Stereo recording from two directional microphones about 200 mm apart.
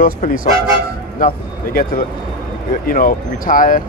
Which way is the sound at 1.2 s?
45° left (ahead or behind).